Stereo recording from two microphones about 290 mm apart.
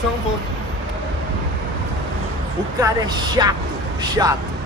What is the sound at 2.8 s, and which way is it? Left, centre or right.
Speech, centre.